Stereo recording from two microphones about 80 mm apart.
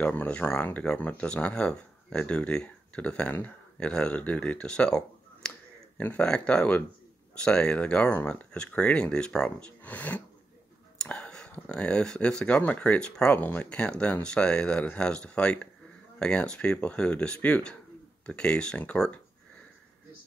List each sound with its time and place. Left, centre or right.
0.0 s speech: centre
9.8 s speech: left
13.4 s speech: left